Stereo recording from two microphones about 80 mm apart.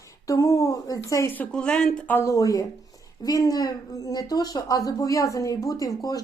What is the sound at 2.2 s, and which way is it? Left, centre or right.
A woman's voice, left.